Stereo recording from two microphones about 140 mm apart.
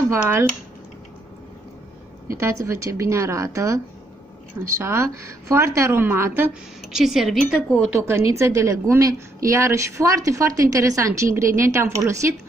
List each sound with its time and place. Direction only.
0.2 s speech: 15° right (ahead or behind)
2.2 s a woman's voice: 20° right (ahead or behind)
6.9 s speech: 5° right (ahead or behind)
8.1 s a woman's voice: 20° right (ahead or behind)